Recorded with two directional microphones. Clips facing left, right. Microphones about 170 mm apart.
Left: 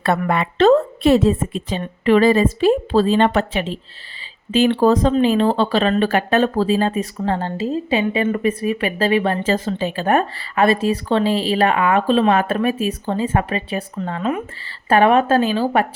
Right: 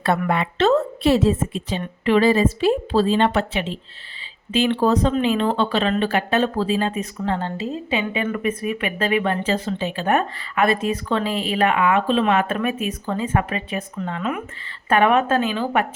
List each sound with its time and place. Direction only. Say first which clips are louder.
0.3 s a woman's voice: left 6 dB; 55° left (ahead or behind)
1.8 s a woman's voice: left 3 dB; 45° left (ahead or behind)